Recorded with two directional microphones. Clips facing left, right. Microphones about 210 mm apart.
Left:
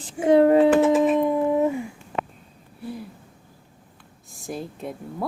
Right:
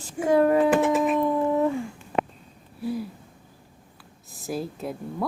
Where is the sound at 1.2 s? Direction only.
15° left (ahead or behind).